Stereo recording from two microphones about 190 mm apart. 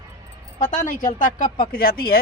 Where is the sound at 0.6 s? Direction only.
45° left (ahead or behind).